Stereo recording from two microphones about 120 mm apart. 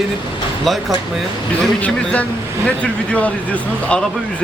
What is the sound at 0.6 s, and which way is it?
Speech, centre (ahead or behind).